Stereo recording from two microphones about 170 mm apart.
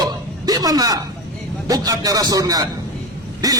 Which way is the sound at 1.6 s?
20° right (ahead or behind).